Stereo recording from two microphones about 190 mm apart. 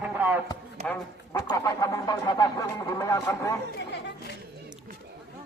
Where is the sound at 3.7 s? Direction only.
60° left (ahead or behind).